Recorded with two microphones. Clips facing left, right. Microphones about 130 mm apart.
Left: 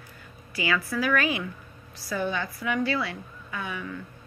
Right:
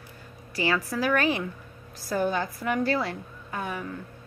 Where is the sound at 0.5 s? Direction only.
35° right (ahead or behind).